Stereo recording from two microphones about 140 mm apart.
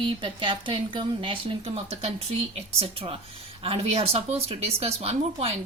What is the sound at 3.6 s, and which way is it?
Speech, 45° right (ahead or behind).